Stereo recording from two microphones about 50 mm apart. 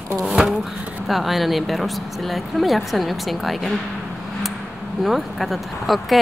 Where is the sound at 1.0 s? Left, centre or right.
Centre.